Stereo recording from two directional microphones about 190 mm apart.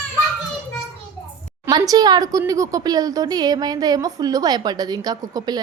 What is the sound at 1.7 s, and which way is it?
Speech, 20° right (ahead or behind).